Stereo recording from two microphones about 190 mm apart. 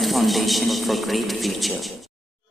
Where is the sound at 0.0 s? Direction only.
Centre (ahead or behind).